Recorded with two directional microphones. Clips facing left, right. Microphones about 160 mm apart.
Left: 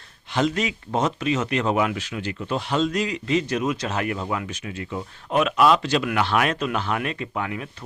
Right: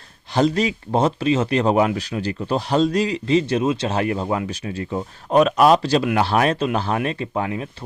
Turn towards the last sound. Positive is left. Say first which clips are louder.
# right 5 dB
turn(degrees=-30)  # may be behind; listen again after turning